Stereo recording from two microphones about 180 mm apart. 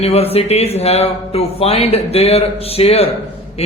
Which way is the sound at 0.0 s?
35° left (ahead or behind).